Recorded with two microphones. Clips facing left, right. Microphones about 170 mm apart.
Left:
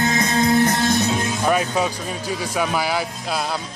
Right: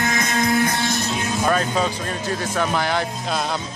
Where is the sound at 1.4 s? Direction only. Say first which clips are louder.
Even; 10° left (ahead or behind).